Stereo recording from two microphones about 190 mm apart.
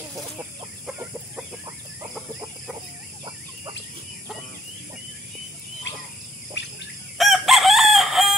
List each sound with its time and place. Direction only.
6.6 s bird: 70° left (ahead or behind)
7.2 s chicken: centre (ahead or behind)